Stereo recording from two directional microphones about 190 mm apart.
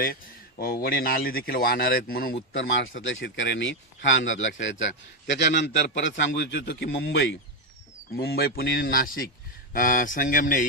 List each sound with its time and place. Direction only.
0.0 s a man's voice: 50° left (ahead or behind)
2.7 s speech: 85° left; by 7.3 s 70° left (ahead or behind)
8.2 s a man's voice: 55° left (ahead or behind)